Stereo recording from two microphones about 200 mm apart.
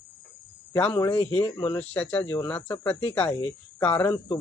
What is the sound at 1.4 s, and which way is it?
Speech, 25° left (ahead or behind).